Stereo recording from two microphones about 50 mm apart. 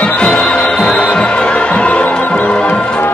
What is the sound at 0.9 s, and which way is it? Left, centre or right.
Music, left.